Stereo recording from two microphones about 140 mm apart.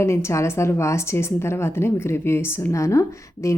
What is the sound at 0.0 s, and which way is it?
A woman's voice, 20° left (ahead or behind).